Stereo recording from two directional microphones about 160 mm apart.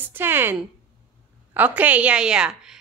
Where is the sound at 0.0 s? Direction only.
15° right (ahead or behind).